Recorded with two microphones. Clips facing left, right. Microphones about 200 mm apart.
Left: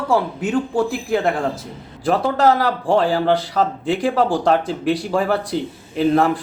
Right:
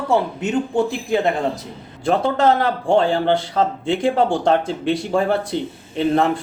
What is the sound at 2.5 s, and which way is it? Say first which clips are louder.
Speech: even; 25° right (ahead or behind).